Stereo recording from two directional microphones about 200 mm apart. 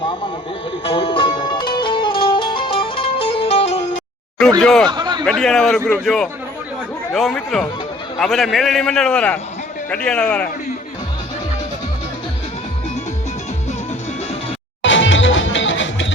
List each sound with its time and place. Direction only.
0.9 s music: 25° left (ahead or behind)
4.6 s a man's voice: centre (ahead or behind)
4.9 s a sound: 20° right (ahead or behind)
5.2 s a man's voice: centre (ahead or behind)
14.8 s music: 70° left (ahead or behind)